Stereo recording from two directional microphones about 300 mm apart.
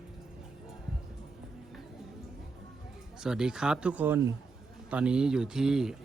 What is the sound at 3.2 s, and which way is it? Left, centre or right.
A man's voice, centre.